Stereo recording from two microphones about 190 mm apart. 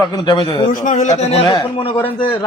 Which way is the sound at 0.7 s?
45° left (ahead or behind).